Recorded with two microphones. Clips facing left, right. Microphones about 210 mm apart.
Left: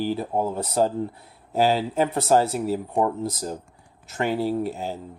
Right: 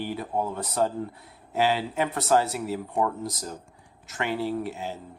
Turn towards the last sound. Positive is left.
turn(degrees=40)  # may be behind; listen again after turning